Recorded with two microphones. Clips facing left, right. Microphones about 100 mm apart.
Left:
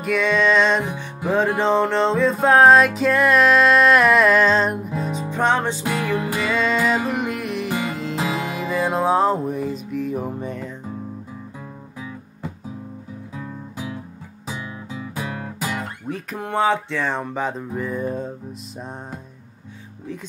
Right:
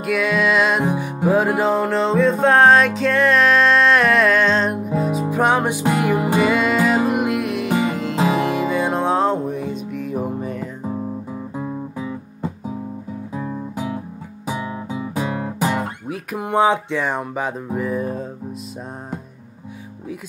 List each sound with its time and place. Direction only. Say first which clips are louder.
0.0 s music: even; 5° right (ahead or behind)
11.5 s music: right 10 dB; 35° right (ahead or behind)
13.3 s music: right 8 dB; 35° right (ahead or behind)
14.9 s guitar: right 5 dB; 20° right (ahead or behind)
16.1 s music: right 1 dB; 15° right (ahead or behind)